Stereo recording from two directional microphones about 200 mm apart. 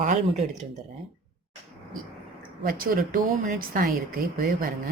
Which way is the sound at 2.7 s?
45° right (ahead or behind).